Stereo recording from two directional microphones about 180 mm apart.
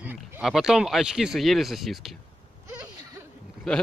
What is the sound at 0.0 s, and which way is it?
Speech, 5° right (ahead or behind).